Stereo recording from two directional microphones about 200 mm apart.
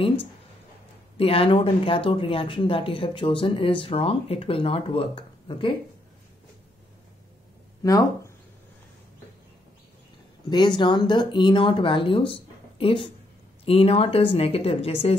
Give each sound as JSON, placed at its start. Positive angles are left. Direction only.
{"t": 1.1, "sound": "speech", "side_deg": 30}
{"t": 7.8, "sound": "speech", "side_deg": 15}
{"t": 10.5, "sound": "speech", "side_deg": 20}